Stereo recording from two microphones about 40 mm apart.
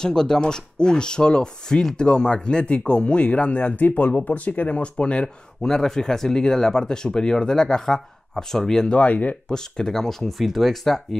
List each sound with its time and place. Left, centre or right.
0.0 s speech: centre; by 4.7 s left
4.7 s speech: left; by 8.9 s centre
8.9 s speech: left
9.5 s speech: centre